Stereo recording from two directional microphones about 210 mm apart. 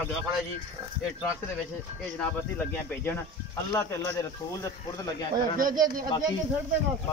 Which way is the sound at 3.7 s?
15° left (ahead or behind).